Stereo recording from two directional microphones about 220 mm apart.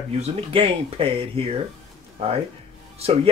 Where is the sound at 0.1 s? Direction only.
25° right (ahead or behind).